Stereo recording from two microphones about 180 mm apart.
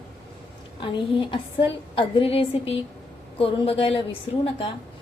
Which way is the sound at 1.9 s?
30° left (ahead or behind).